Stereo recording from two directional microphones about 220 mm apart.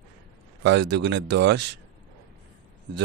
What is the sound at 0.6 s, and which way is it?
Speech, 50° right (ahead or behind).